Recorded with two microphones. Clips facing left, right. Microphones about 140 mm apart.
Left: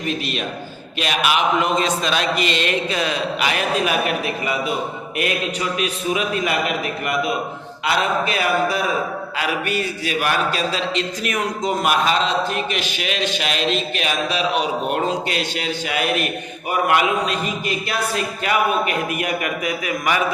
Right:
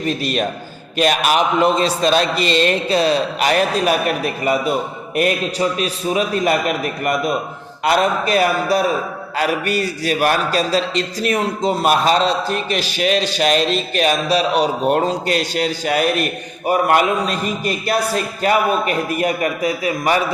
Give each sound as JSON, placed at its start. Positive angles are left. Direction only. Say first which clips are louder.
{"t": 0.0, "sound": "a man's voice", "louder": "right 5 dB", "side_deg": -40}